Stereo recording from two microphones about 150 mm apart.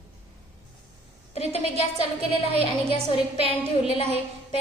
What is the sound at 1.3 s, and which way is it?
Speech, 45° left (ahead or behind).